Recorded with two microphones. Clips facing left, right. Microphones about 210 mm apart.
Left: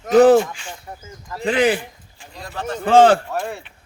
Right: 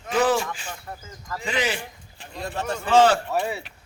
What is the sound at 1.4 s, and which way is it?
Speech, 55° left (ahead or behind).